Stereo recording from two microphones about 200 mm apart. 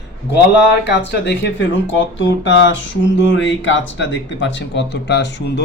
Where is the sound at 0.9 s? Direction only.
60° left (ahead or behind).